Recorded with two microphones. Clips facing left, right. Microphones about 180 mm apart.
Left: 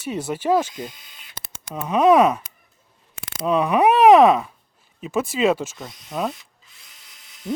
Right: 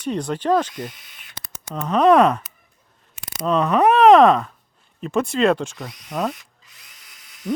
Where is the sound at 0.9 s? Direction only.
25° left (ahead or behind).